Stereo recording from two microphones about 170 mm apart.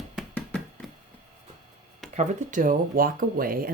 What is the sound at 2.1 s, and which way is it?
Speech, 45° right (ahead or behind).